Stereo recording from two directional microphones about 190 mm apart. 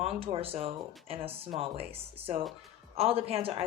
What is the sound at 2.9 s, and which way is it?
Speech, 30° right (ahead or behind).